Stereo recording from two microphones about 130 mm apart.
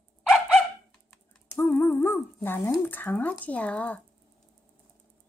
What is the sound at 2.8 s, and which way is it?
Speech, 15° left (ahead or behind).